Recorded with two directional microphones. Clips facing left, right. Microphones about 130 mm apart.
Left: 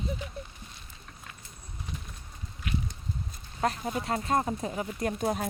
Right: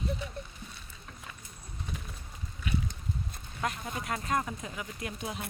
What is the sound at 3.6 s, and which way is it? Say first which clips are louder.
Speech: left 5 dB; 35° left (ahead or behind).